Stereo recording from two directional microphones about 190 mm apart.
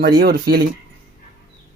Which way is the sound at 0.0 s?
50° right (ahead or behind).